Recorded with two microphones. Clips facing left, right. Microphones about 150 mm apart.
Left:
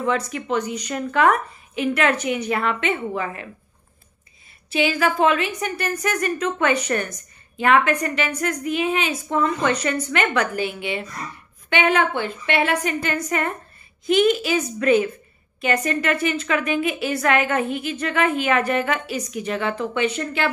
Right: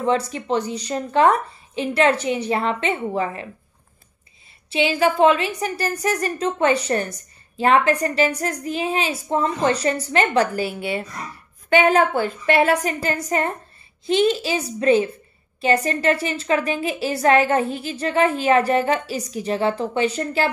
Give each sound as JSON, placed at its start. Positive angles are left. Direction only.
{"t": 0.0, "sound": "a woman's voice", "side_deg": -30}
{"t": 4.6, "sound": "a woman's voice", "side_deg": -30}